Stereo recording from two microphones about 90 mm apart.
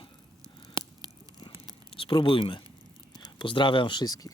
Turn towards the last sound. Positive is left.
turn(degrees=45)  # may be behind; listen again after turning